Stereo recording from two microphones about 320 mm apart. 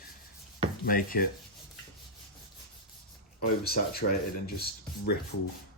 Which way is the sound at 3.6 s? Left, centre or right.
Left.